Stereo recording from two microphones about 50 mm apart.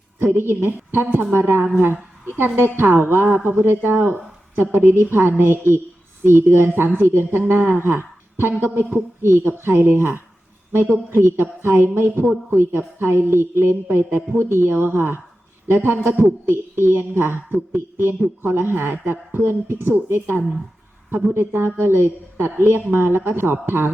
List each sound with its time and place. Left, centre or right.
0.2 s a woman's voice: right